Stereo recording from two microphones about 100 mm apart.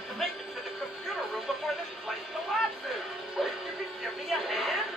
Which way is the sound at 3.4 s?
Centre (ahead or behind).